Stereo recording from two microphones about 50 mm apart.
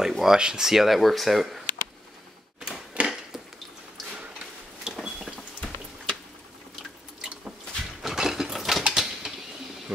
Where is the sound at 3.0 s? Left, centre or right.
Right.